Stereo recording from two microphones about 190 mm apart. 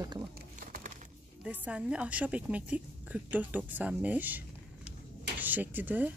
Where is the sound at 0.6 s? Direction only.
45° right (ahead or behind).